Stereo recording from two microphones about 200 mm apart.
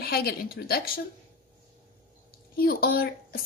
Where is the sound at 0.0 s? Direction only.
50° left (ahead or behind).